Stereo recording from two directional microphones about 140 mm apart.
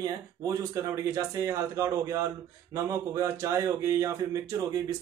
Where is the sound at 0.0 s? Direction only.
25° right (ahead or behind).